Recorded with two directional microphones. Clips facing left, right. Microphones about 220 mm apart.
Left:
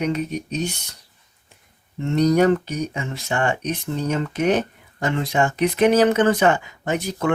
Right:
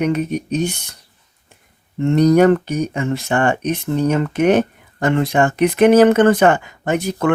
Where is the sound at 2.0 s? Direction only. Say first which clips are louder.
Right 5 dB; 55° right (ahead or behind).